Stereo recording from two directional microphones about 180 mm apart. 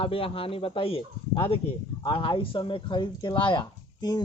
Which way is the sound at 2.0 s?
30° left (ahead or behind).